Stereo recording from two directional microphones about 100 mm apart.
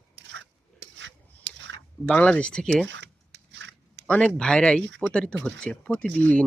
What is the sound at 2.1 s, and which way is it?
Speech, 15° left (ahead or behind).